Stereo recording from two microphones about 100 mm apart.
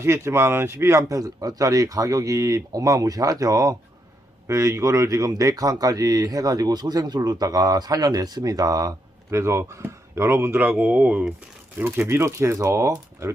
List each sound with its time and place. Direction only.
0.0 s speech: 25° right (ahead or behind)